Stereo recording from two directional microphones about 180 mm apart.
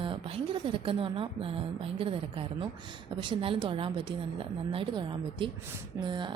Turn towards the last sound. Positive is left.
turn(degrees=-25)  # may be behind; listen again after turning